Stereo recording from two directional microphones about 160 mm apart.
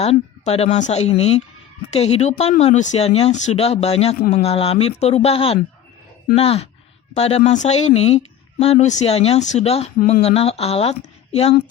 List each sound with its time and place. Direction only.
0.0 s speech: 40° left (ahead or behind)